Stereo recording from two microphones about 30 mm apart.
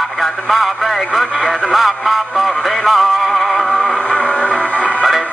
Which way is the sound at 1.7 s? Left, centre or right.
Centre.